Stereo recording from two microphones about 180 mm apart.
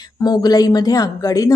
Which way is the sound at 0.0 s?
20° left (ahead or behind).